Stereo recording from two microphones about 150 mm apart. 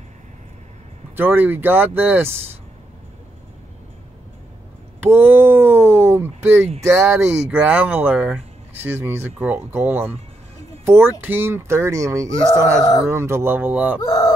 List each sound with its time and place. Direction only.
1.1 s speech: 15° right (ahead or behind)
5.0 s speech: 15° right (ahead or behind)
14.0 s speech: 25° left (ahead or behind)